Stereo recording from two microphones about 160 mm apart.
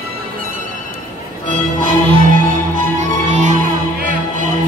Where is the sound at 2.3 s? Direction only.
55° right (ahead or behind).